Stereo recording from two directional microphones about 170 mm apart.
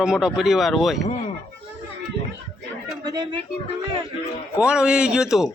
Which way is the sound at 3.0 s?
25° right (ahead or behind).